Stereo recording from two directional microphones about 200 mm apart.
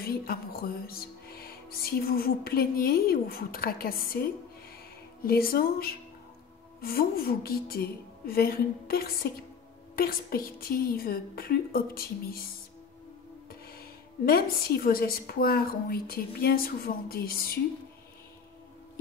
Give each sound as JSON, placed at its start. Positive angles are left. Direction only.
{"t": 0.0, "sound": "speech", "side_deg": 50}
{"t": 13.5, "sound": "speech", "side_deg": 50}